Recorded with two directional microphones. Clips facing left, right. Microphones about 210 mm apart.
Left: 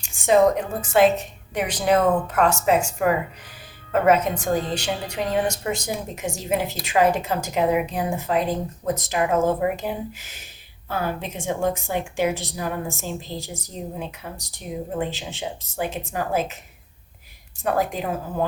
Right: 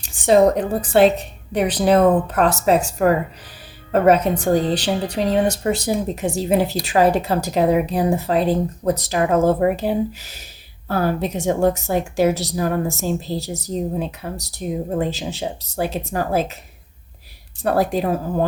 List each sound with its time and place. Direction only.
0.0 s a woman's voice: 35° right (ahead or behind)
17.6 s a woman's voice: 35° right (ahead or behind)